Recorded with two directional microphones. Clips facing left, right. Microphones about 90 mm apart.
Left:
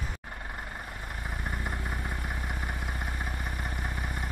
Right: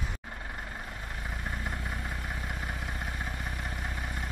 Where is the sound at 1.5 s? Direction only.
5° left (ahead or behind).